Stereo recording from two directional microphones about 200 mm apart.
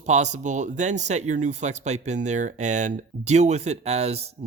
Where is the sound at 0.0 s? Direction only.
35° right (ahead or behind).